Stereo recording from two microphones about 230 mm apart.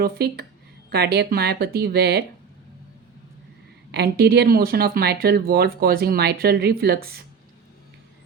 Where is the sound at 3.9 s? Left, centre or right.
Right.